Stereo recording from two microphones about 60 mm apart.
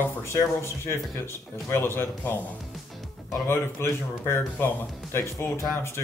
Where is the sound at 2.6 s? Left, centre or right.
Centre.